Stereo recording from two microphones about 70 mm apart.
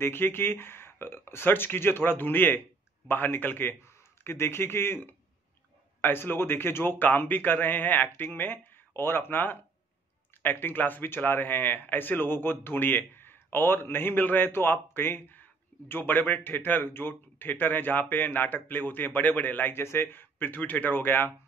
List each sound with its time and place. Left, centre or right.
0.0 s a man's voice: left